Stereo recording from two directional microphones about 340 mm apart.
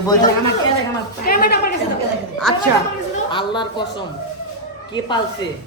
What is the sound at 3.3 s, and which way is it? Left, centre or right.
Speech, centre.